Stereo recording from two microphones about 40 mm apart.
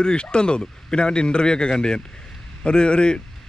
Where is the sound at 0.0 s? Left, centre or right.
Left.